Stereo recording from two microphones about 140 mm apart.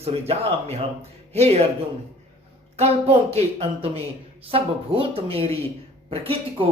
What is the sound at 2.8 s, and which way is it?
Speech, 45° right (ahead or behind).